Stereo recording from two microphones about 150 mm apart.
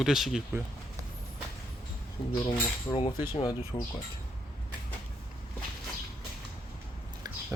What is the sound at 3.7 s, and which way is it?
Speech, 30° left (ahead or behind).